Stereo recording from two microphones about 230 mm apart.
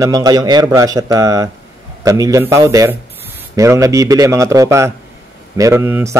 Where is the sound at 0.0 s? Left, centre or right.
Centre.